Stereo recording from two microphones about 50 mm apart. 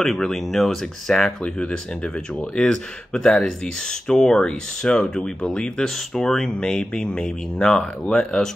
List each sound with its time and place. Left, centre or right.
0.0 s speech: centre
2.5 s speech: centre
6.6 s speech: centre